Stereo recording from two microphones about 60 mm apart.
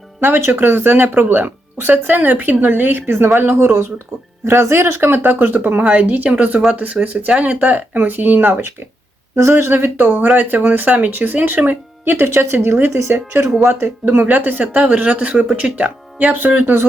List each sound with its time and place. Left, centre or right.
0.2 s speech: right
9.3 s speech: right
12.1 s speech: right
13.4 s speech: right